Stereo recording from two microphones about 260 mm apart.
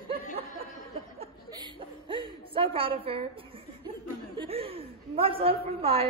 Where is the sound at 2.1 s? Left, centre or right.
Centre.